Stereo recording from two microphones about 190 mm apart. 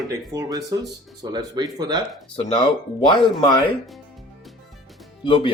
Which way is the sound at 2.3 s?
25° left (ahead or behind).